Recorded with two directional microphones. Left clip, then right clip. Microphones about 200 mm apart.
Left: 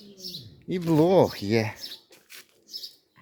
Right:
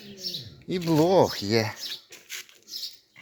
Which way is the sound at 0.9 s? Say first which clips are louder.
Even; 35° left (ahead or behind).